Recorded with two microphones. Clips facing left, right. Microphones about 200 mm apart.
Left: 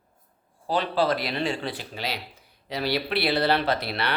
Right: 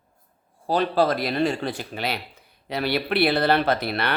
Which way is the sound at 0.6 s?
45° right (ahead or behind).